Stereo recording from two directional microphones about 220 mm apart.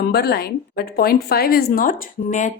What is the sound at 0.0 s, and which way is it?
A woman's voice, 45° left (ahead or behind).